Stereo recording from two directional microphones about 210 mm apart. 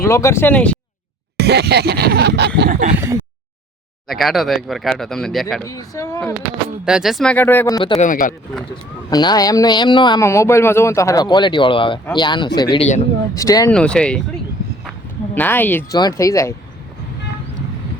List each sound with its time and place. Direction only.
0.0 s speech: 15° left (ahead or behind)
1.4 s a sound: 50° right (ahead or behind)
2.6 s a sound: 40° right (ahead or behind)
4.1 s speech: centre (ahead or behind)
5.6 s speech: 15° left (ahead or behind)
6.8 s speech: centre (ahead or behind)
7.8 s speech: 25° left (ahead or behind)
8.0 s speech: 40° left (ahead or behind)
9.0 s speech: 20° left (ahead or behind)
13.3 s speech: 15° left (ahead or behind)
13.7 s speech: 5° left (ahead or behind)
15.4 s speech: 10° left (ahead or behind)